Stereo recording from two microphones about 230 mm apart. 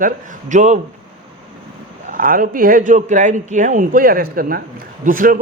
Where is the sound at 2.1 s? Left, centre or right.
Right.